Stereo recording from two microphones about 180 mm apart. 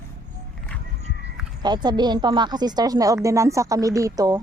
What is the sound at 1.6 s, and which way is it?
Speech, 25° right (ahead or behind).